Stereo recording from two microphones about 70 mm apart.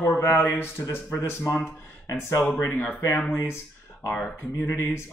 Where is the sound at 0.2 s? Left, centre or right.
Left.